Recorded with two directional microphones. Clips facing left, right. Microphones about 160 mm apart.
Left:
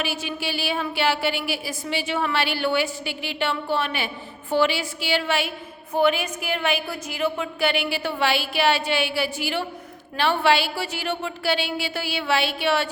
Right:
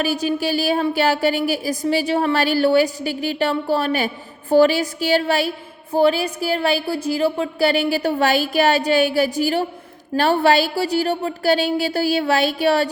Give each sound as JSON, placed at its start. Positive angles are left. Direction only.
{"t": 0.0, "sound": "a woman's voice", "side_deg": -40}